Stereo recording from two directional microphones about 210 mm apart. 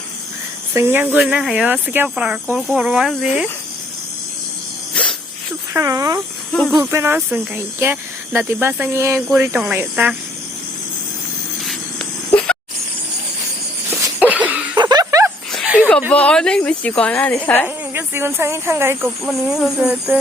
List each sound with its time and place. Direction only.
0.7 s speech: 10° right (ahead or behind)
5.7 s speech: 15° right (ahead or behind)
6.5 s speech: 5° left (ahead or behind)
6.7 s speech: 10° right (ahead or behind)
11.6 s a sound: centre (ahead or behind)
14.2 s cough: 5° right (ahead or behind)
14.8 s a sound: 20° right (ahead or behind)
15.5 s a sound: 5° right (ahead or behind)
15.9 s speech: 5° left (ahead or behind)
17.9 s speech: 10° right (ahead or behind)
19.0 s speech: centre (ahead or behind)